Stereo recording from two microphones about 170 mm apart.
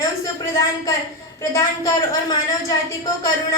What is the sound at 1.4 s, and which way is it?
Music, 20° left (ahead or behind).